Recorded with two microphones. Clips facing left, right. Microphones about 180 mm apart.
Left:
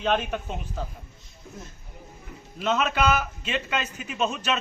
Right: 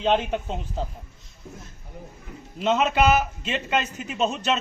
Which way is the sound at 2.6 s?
20° right (ahead or behind).